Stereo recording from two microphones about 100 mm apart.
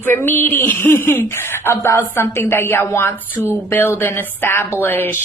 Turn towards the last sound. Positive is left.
turn(degrees=20)  # may be behind; listen again after turning